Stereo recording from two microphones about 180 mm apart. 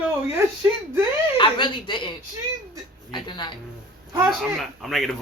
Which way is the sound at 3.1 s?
25° left (ahead or behind).